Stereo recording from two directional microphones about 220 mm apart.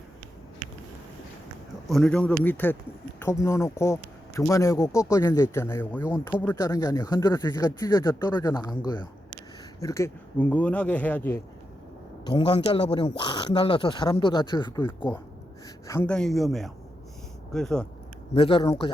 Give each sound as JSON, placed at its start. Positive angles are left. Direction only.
{"t": 1.9, "sound": "speech", "side_deg": 5}
{"t": 9.8, "sound": "speech", "side_deg": 15}
{"t": 12.2, "sound": "speech", "side_deg": 20}
{"t": 18.3, "sound": "speech", "side_deg": 25}